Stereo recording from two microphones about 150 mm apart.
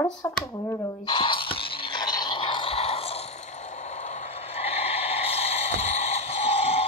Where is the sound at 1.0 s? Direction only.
35° left (ahead or behind).